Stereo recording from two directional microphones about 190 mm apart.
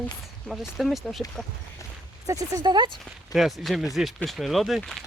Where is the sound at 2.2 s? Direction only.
15° right (ahead or behind).